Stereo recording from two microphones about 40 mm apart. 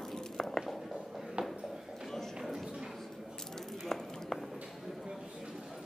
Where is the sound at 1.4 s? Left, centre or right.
Right.